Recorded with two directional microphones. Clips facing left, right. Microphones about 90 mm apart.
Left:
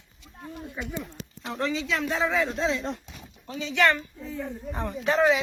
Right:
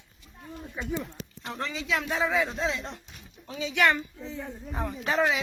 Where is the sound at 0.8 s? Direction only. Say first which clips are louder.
Right 3 dB; centre (ahead or behind); by 4.4 s 15° right (ahead or behind).